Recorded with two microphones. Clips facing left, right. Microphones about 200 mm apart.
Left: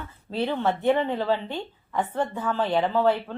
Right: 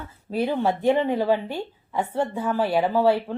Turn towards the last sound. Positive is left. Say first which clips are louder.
# right 2 dB
turn(degrees=-10)  # may be behind; listen again after turning